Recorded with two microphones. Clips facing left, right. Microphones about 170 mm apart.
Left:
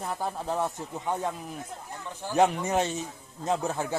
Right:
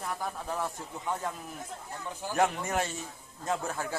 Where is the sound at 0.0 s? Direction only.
25° left (ahead or behind).